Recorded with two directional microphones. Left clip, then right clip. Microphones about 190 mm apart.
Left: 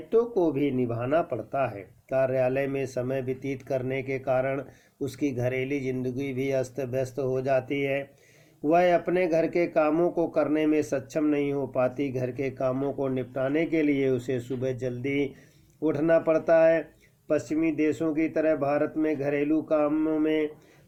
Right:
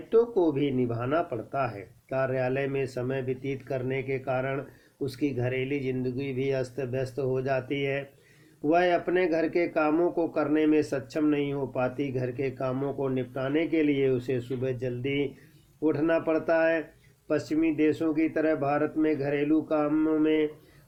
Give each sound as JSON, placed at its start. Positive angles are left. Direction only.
{"t": 0.1, "sound": "speech", "side_deg": 30}